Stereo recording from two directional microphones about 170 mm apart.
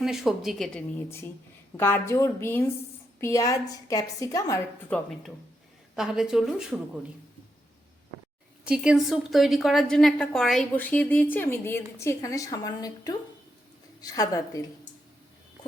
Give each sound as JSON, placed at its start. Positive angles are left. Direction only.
{"t": 0.0, "sound": "a woman's voice", "side_deg": 0}
{"t": 4.9, "sound": "a woman's voice", "side_deg": 10}
{"t": 6.0, "sound": "a woman's voice", "side_deg": -5}
{"t": 8.6, "sound": "a woman's voice", "side_deg": -5}